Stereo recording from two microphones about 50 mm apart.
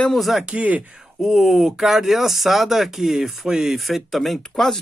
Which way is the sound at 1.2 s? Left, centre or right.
Centre.